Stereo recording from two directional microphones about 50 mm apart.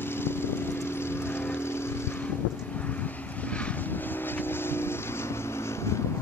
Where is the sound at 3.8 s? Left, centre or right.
Left.